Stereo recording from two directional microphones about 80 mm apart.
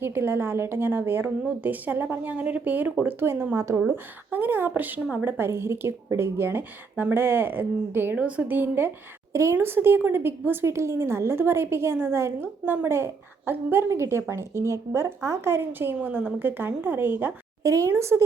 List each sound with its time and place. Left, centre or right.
0.0 s speech: right
9.3 s a woman's voice: right
16.0 s speech: centre
17.6 s a woman's voice: right